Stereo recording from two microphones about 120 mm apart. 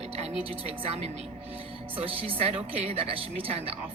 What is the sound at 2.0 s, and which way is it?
A woman's voice, 55° right (ahead or behind).